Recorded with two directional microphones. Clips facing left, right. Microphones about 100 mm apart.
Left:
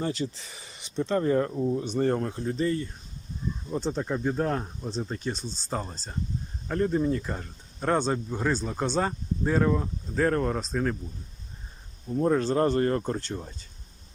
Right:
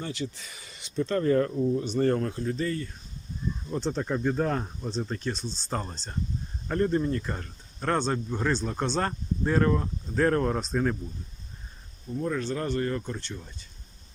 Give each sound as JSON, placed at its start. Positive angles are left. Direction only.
{"t": 0.0, "sound": "speech", "side_deg": 35}
{"t": 3.7, "sound": "speech", "side_deg": 10}
{"t": 12.2, "sound": "speech", "side_deg": 35}